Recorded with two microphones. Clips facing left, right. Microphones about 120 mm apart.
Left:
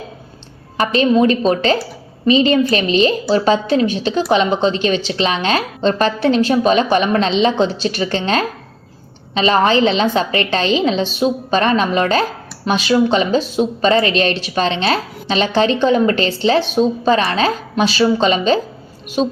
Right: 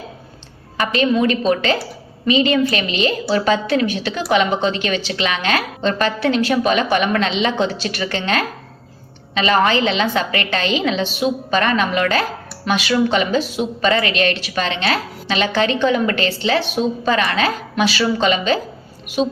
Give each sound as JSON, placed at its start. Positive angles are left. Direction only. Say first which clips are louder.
{"t": 0.8, "sound": "a woman's voice", "louder": "left 4 dB", "side_deg": 35}